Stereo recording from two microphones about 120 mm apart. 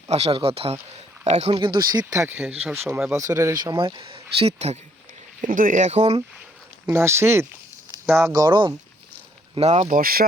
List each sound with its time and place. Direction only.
0.1 s speech: 55° right (ahead or behind)
1.2 s speech: 70° right (ahead or behind)
1.5 s speech: 40° right (ahead or behind)
2.3 s speech: 15° right (ahead or behind)
3.1 s speech: 25° right (ahead or behind); by 4.8 s 60° right (ahead or behind)
5.4 s speech: 90° right; by 6.1 s 70° right (ahead or behind)
6.8 s speech: 20° right (ahead or behind)
8.4 s speech: 45° right (ahead or behind)
9.6 s speech: 70° right (ahead or behind)